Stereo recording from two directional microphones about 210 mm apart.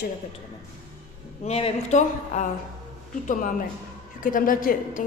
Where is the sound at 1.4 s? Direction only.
30° left (ahead or behind).